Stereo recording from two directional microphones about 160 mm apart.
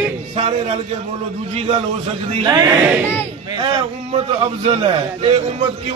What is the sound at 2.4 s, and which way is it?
A man's voice, 25° right (ahead or behind).